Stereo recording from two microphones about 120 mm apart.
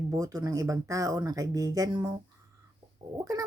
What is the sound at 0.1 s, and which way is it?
Speech, 30° right (ahead or behind).